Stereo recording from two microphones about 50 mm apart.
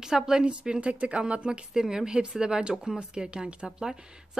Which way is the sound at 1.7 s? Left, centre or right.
Centre.